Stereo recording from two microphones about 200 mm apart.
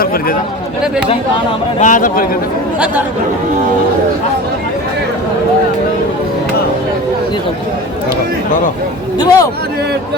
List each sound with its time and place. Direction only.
0.0 s speech: 50° left (ahead or behind)
1.8 s speech: 40° left (ahead or behind)
2.7 s speech: 5° right (ahead or behind)
9.1 s a man's voice: 20° left (ahead or behind)